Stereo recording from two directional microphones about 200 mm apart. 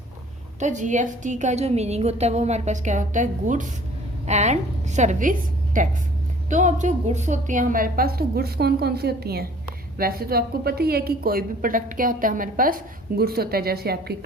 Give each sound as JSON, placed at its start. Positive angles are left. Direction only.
{"t": 0.6, "sound": "a woman's voice", "side_deg": -40}